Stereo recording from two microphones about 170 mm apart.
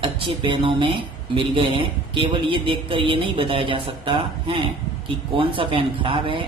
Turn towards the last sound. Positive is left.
turn(degrees=-30)  # may be behind; listen again after turning